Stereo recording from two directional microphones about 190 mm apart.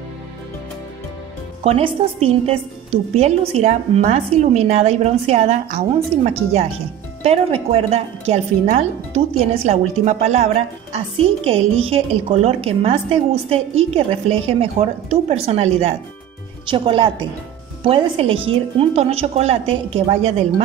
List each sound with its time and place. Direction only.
1.6 s a woman's voice: 30° right (ahead or behind)